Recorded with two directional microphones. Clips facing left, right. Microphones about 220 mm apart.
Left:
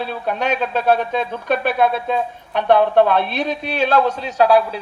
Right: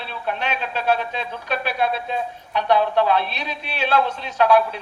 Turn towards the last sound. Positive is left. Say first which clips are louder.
# left 3 dB
turn(degrees=35)  # may be behind; listen again after turning